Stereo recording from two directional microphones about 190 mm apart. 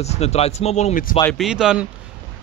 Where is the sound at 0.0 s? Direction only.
35° left (ahead or behind).